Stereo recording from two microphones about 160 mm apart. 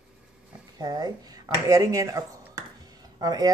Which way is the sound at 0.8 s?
25° right (ahead or behind).